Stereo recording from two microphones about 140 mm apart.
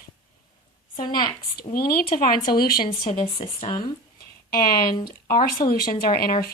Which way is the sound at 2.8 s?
40° left (ahead or behind).